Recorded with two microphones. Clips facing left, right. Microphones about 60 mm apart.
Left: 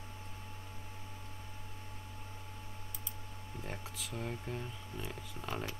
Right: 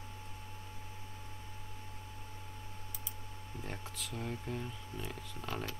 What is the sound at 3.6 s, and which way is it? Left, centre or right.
Speech, centre.